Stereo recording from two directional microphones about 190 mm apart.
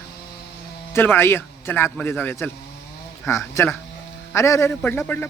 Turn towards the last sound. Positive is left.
turn(degrees=10)  # may be behind; listen again after turning